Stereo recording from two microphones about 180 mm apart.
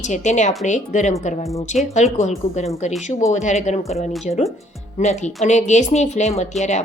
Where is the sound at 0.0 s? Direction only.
40° left (ahead or behind).